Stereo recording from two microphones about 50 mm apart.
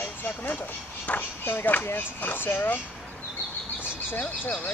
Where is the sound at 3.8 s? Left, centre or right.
Left.